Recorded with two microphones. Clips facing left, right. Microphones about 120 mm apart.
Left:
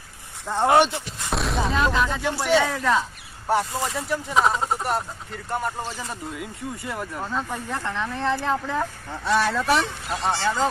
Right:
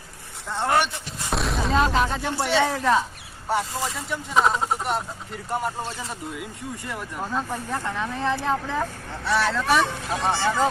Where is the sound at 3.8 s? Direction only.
5° left (ahead or behind).